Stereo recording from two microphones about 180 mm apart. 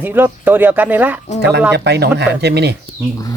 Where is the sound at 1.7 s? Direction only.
65° right (ahead or behind).